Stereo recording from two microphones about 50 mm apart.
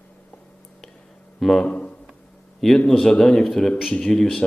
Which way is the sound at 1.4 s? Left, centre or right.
Centre.